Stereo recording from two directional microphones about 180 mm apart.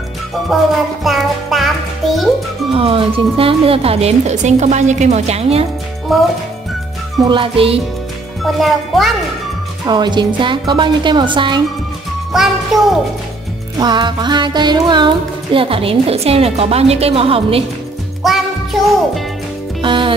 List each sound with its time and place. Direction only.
0.5 s speech: centre (ahead or behind)
1.0 s music: centre (ahead or behind)
2.7 s music: 30° right (ahead or behind)
6.1 s speech: centre (ahead or behind)
7.2 s speech: 25° right (ahead or behind)
8.5 s speech: centre (ahead or behind)
9.8 s speech: 25° right (ahead or behind)
12.3 s music: centre (ahead or behind)
13.7 s music: 25° right (ahead or behind)
18.2 s music: centre (ahead or behind)
19.8 s music: 25° right (ahead or behind)